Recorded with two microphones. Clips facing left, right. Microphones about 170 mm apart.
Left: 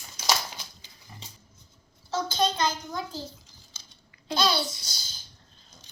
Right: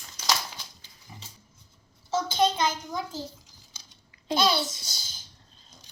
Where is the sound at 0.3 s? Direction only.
15° left (ahead or behind).